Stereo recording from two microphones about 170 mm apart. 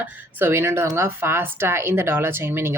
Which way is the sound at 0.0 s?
10° right (ahead or behind).